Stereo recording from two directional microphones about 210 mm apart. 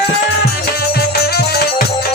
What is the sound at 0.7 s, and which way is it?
Music, 50° left (ahead or behind).